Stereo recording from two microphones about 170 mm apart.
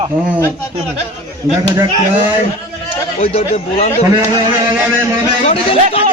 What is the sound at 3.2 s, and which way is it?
Speech, 40° left (ahead or behind).